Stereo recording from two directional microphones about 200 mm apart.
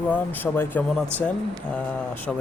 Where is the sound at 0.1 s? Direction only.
10° left (ahead or behind).